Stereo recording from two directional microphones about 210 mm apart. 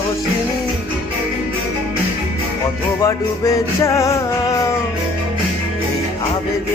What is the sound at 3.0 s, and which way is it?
Music, 15° left (ahead or behind).